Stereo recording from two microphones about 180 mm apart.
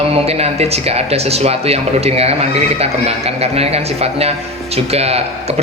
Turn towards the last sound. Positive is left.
turn(degrees=-35)  # may be behind; listen again after turning